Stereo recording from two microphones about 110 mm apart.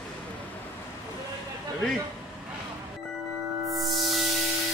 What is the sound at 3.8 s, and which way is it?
Music, centre (ahead or behind).